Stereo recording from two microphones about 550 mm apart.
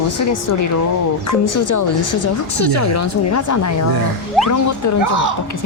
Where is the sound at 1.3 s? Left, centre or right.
Left.